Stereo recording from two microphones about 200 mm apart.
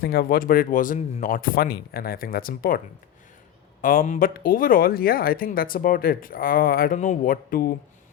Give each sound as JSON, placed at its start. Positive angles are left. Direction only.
{"t": 0.0, "sound": "speech", "side_deg": 50}